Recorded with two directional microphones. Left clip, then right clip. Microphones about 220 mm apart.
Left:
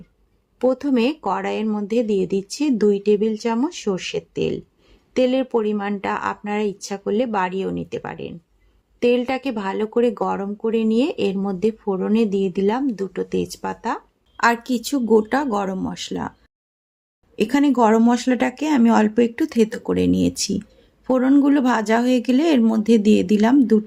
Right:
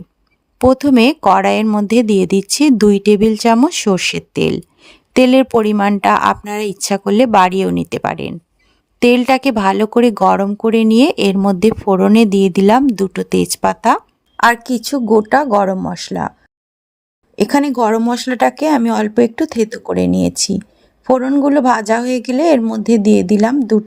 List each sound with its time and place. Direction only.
0.6 s speech: 50° right (ahead or behind)
14.3 s speech: 40° right (ahead or behind)
17.3 s speech: 40° right (ahead or behind)